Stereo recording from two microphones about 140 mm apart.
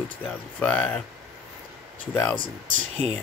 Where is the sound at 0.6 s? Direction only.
10° left (ahead or behind).